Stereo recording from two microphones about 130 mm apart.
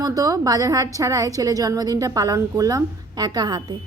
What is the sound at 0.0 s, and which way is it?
A woman's voice, 30° right (ahead or behind).